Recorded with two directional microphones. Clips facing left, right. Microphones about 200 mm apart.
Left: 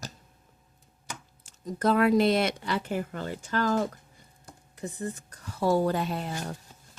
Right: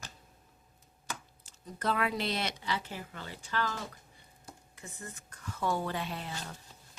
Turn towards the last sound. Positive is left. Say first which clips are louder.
# left 8 dB
turn(degrees=45)  # may be behind; listen again after turning